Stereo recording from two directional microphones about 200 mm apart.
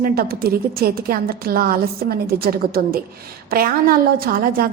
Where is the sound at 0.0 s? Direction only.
50° right (ahead or behind).